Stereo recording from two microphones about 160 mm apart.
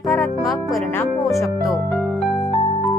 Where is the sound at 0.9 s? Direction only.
15° left (ahead or behind).